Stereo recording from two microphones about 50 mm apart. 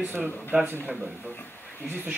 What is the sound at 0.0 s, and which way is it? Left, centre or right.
Speech, right.